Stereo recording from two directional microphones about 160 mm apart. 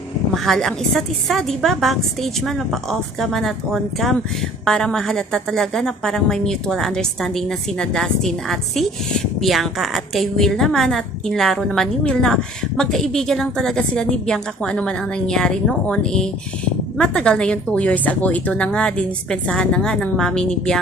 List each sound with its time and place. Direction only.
0.4 s a woman's voice: 5° left (ahead or behind)